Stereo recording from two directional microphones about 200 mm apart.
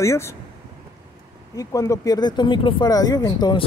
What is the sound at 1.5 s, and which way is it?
Speech, 15° left (ahead or behind).